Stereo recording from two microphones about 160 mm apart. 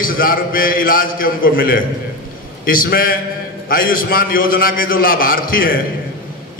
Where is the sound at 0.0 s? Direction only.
65° left (ahead or behind).